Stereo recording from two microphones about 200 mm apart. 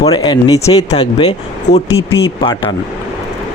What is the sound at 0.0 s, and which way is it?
A man's voice, 20° left (ahead or behind).